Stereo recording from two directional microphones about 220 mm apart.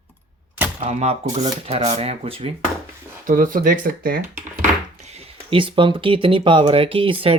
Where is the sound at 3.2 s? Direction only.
35° right (ahead or behind).